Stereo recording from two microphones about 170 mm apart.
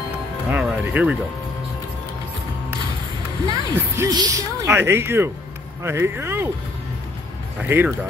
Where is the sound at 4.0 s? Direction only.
20° right (ahead or behind).